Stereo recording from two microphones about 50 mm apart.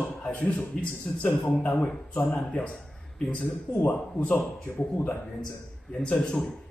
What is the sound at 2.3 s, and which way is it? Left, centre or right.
Speech, left.